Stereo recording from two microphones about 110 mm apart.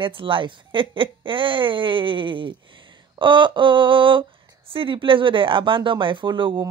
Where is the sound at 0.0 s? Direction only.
50° right (ahead or behind).